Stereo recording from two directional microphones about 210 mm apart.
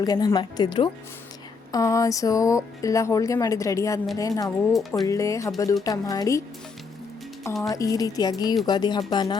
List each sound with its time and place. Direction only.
0.0 s a woman's voice: 20° left (ahead or behind)
4.7 s speech: centre (ahead or behind)
5.0 s speech: 15° left (ahead or behind)
7.6 s a woman's voice: 15° left (ahead or behind)